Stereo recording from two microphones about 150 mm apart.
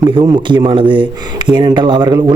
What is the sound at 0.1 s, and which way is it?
Speech, 35° right (ahead or behind).